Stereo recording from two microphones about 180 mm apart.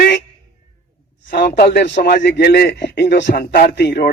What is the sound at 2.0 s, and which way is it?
Speech, 65° left (ahead or behind).